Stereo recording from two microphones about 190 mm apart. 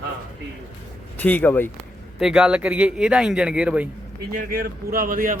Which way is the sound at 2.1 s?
5° right (ahead or behind).